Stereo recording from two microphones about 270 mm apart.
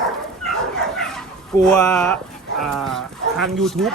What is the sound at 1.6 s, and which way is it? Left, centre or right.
Speech, centre.